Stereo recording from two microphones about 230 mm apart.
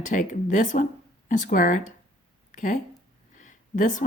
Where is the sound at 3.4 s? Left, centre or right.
Left.